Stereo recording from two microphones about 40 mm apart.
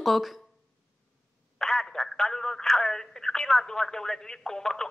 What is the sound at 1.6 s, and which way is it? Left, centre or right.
Speech, centre.